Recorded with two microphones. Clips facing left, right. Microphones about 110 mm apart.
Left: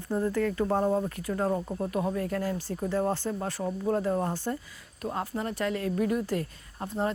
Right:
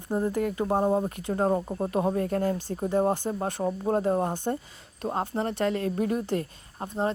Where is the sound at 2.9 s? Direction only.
20° right (ahead or behind).